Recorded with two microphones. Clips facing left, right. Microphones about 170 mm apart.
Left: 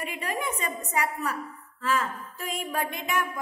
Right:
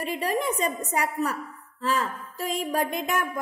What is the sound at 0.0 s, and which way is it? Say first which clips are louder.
A woman's voice: right 5 dB; 35° right (ahead or behind).